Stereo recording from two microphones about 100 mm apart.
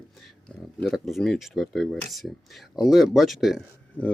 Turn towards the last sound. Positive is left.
turn(degrees=15)  # may be behind; listen again after turning